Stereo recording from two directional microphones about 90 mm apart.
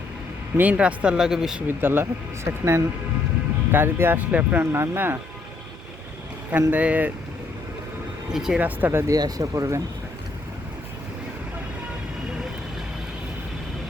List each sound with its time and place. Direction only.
0.5 s speech: 15° right (ahead or behind)
1.6 s speech: 25° right (ahead or behind)
4.6 s speech: 30° right (ahead or behind)
6.6 s speech: 20° right (ahead or behind)
8.3 s speech: 5° right (ahead or behind)
8.6 s speech: 25° right (ahead or behind)
9.1 s speech: 40° right (ahead or behind)